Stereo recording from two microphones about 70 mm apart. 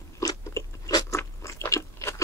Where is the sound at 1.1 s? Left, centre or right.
Left.